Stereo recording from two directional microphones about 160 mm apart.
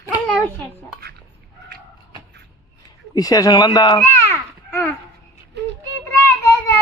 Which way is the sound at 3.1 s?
25° left (ahead or behind).